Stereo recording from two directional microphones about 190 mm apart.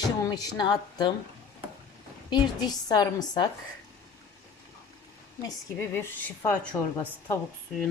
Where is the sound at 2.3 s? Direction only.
20° left (ahead or behind).